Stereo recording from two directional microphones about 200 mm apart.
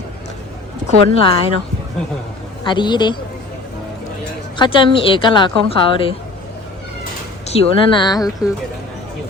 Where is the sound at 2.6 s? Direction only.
20° left (ahead or behind).